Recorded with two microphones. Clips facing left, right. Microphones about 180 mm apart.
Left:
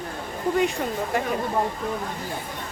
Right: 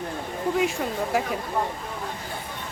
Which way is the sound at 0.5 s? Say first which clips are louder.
Left 2 dB; centre (ahead or behind).